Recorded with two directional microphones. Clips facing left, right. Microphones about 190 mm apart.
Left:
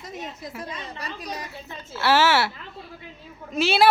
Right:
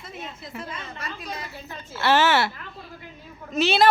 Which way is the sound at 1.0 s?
40° left (ahead or behind).